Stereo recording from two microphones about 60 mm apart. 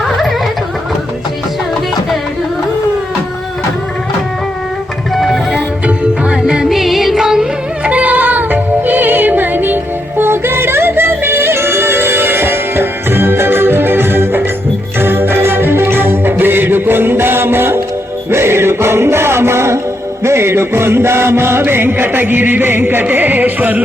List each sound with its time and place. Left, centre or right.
5.1 s music: centre
7.9 s music: right
20.2 s chant: right